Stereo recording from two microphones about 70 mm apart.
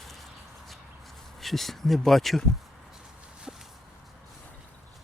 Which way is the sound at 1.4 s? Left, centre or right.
Centre.